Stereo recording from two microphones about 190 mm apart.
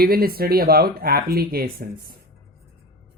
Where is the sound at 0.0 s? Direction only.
50° right (ahead or behind).